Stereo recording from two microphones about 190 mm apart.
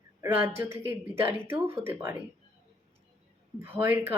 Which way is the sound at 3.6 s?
10° right (ahead or behind).